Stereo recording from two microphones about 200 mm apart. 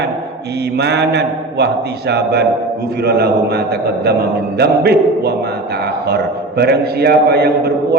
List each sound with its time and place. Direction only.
0.8 s a man's voice: 55° right (ahead or behind)